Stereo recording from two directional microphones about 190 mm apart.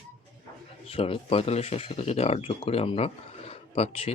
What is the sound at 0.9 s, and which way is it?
Speech, 30° left (ahead or behind).